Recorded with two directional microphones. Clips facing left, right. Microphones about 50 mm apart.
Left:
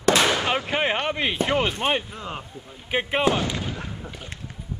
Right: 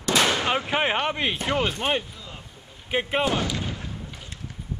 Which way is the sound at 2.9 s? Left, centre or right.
Centre.